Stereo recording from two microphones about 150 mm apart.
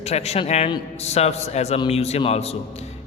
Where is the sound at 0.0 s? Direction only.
45° left (ahead or behind).